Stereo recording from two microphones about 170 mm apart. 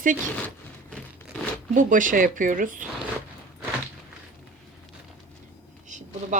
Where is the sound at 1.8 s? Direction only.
50° right (ahead or behind).